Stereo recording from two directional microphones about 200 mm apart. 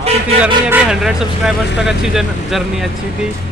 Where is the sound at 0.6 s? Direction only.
5° right (ahead or behind).